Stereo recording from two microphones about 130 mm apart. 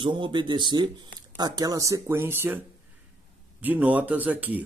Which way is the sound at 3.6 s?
10° right (ahead or behind).